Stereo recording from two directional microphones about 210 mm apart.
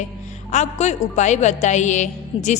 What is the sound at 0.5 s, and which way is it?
A woman's voice, 30° left (ahead or behind).